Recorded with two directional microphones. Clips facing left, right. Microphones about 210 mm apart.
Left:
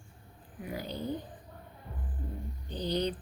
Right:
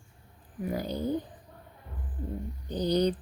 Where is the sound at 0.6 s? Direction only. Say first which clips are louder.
Right 6 dB; 45° right (ahead or behind).